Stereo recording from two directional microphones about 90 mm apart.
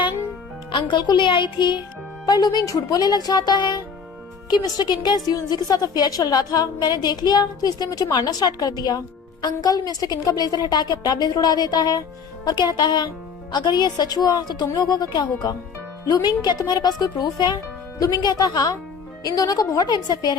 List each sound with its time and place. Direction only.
0.7 s speech: 60° left (ahead or behind)
2.2 s a woman's voice: 50° left (ahead or behind)